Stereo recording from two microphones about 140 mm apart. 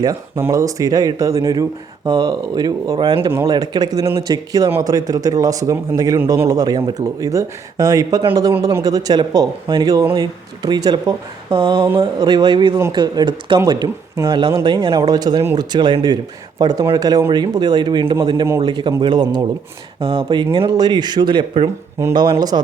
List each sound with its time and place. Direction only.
0.0 s speech: 20° right (ahead or behind)
7.0 s speech: 25° right (ahead or behind)